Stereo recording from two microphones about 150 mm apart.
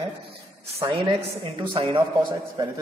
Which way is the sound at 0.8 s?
30° right (ahead or behind).